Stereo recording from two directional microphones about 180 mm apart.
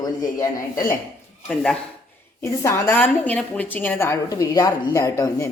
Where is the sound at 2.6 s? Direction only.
15° left (ahead or behind).